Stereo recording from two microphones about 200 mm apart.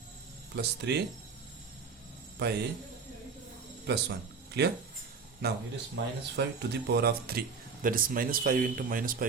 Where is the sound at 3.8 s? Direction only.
55° right (ahead or behind).